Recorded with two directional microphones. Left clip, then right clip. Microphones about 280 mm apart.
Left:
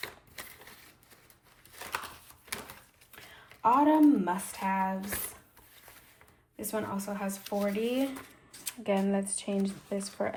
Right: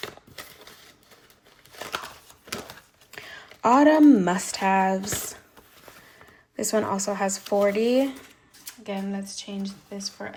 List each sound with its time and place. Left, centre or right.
3.6 s speech: right
6.6 s speech: right
8.8 s speech: centre